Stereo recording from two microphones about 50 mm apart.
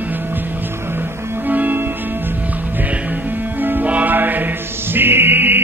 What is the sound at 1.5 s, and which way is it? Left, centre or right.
Music, right.